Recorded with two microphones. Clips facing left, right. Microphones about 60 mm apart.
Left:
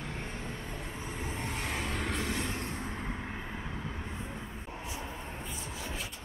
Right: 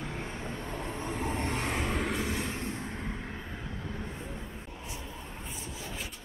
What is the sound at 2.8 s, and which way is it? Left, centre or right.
Vehicle, centre.